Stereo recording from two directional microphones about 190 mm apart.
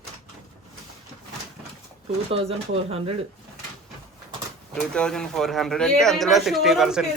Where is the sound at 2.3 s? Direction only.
30° right (ahead or behind).